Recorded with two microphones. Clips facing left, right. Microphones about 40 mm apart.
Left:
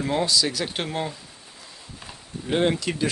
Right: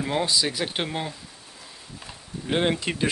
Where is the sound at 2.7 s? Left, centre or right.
Right.